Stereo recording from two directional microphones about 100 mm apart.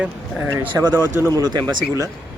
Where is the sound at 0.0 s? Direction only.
15° right (ahead or behind).